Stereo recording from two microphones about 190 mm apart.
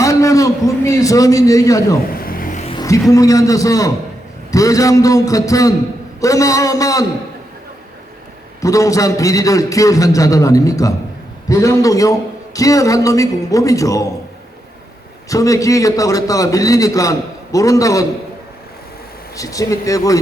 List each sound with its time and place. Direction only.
0.0 s a sound: 15° left (ahead or behind)
2.1 s a sound: 50° left (ahead or behind)
2.6 s a man's voice: 20° left (ahead or behind)
8.6 s a man's voice: 15° left (ahead or behind)
15.3 s a man's voice: 15° left (ahead or behind)
19.4 s a man's voice: 15° left (ahead or behind)